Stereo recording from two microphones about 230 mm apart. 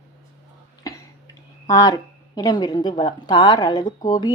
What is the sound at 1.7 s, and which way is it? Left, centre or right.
A woman's voice, centre.